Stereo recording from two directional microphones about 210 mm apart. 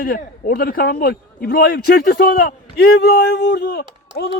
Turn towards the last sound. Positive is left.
turn(degrees=55)  # may be behind; listen again after turning